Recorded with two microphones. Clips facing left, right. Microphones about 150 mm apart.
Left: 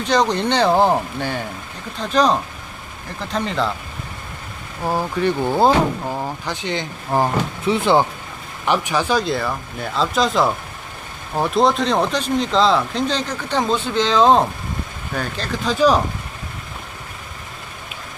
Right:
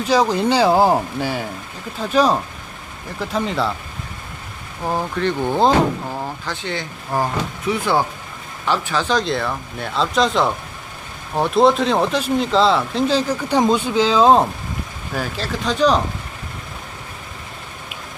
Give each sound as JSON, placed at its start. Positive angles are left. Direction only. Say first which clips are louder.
{"t": 0.0, "sound": "speech", "louder": "right 1 dB", "side_deg": -5}
{"t": 4.9, "sound": "speech", "louder": "left 1 dB", "side_deg": 5}